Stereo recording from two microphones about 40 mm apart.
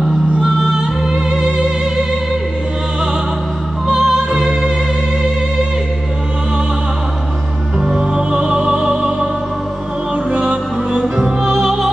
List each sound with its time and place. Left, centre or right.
0.7 s music: centre
3.9 s music: centre
7.8 s music: centre
10.3 s music: right
10.9 s music: centre